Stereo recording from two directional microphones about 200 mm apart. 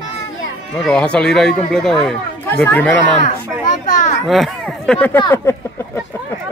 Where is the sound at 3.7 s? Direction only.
40° left (ahead or behind).